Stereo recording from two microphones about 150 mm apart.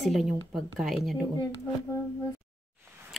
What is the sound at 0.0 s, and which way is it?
Speech, centre (ahead or behind).